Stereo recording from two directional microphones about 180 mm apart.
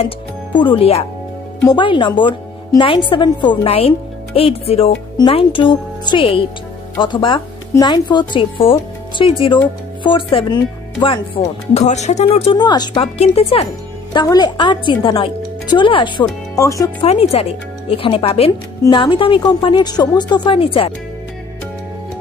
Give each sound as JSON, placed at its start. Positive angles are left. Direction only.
{"t": 0.6, "sound": "speech", "side_deg": 30}
{"t": 14.1, "sound": "speech", "side_deg": 20}
{"t": 17.0, "sound": "speech", "side_deg": 35}